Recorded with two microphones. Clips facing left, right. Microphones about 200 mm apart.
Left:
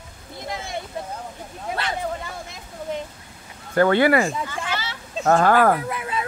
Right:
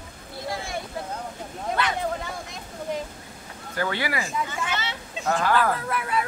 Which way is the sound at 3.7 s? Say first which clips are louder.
Left 11 dB; 55° left (ahead or behind).